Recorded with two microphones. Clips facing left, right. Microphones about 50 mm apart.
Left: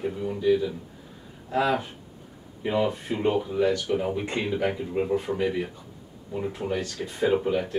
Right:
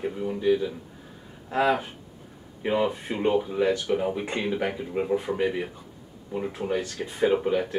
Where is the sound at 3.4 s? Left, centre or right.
Centre.